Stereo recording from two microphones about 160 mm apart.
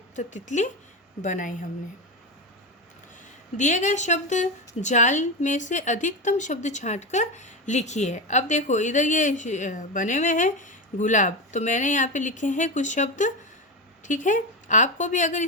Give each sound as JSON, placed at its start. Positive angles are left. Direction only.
{"t": 0.2, "sound": "a woman's voice", "side_deg": 50}
{"t": 3.6, "sound": "a woman's voice", "side_deg": 50}